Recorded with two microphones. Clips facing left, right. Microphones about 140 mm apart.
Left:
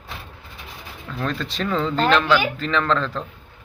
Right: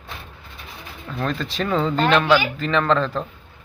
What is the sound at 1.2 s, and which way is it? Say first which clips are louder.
Speech: right 1 dB; centre (ahead or behind).